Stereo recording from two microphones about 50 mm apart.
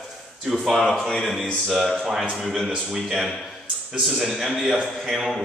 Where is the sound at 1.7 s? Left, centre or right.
Centre.